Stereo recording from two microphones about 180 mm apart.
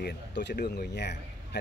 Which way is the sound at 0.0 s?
70° left (ahead or behind).